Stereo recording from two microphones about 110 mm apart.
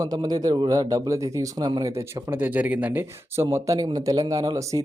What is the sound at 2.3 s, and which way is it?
Speech, 15° right (ahead or behind).